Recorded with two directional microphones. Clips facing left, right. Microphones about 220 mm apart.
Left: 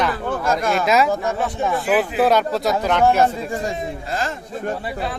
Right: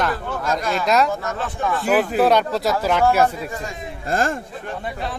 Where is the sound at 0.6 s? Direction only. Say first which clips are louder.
Left 3 dB; 50° left (ahead or behind).